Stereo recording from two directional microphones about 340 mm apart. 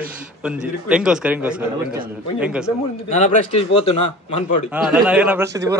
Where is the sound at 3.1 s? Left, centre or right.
Left.